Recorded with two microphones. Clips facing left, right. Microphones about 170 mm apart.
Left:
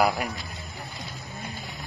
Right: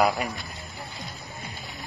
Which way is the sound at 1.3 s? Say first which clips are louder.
Left 3 dB; 55° left (ahead or behind).